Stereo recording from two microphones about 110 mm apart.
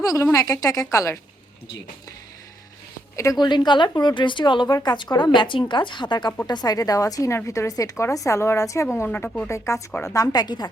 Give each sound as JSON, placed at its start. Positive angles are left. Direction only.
{"t": 0.0, "sound": "a woman's voice", "side_deg": 30}
{"t": 3.3, "sound": "a woman's voice", "side_deg": 40}
{"t": 9.0, "sound": "speech", "side_deg": 15}
{"t": 9.5, "sound": "a woman's voice", "side_deg": 25}